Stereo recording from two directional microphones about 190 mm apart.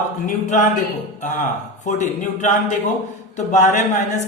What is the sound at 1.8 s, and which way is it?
Speech, 40° left (ahead or behind).